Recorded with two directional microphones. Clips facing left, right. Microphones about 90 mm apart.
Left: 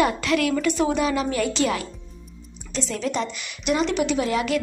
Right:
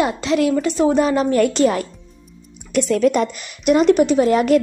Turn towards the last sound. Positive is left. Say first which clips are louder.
# right 8 dB
turn(degrees=-45)  # may be behind; listen again after turning